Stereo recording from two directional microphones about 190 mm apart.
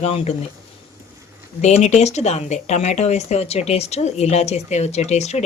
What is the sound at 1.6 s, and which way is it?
Speech, 35° left (ahead or behind).